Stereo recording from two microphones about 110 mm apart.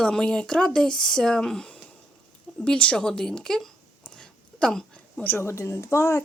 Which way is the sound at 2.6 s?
10° left (ahead or behind).